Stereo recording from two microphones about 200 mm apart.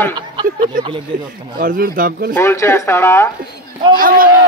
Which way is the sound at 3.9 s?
45° right (ahead or behind).